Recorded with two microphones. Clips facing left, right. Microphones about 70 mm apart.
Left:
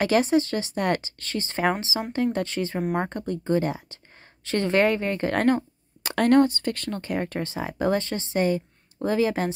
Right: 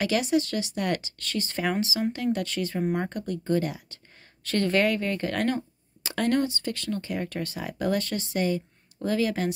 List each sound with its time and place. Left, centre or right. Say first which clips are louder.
0.0 s speech: left 4 dB; left
5.6 s speech: left 3 dB; left
7.2 s speech: left 3 dB; left